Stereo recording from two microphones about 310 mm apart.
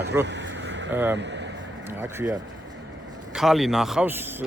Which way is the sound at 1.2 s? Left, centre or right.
Right.